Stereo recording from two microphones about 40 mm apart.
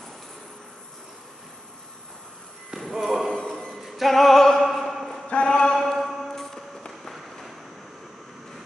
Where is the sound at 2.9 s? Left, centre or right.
Centre.